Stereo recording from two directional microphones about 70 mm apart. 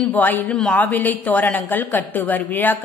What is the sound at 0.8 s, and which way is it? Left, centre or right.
A woman's voice, left.